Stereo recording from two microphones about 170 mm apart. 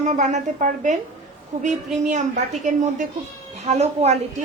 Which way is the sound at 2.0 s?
45° right (ahead or behind).